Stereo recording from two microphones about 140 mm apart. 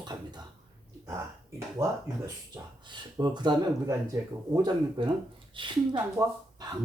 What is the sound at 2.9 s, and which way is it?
Speech, 30° right (ahead or behind).